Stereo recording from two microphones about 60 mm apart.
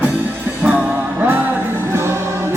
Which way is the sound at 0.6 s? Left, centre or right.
Right.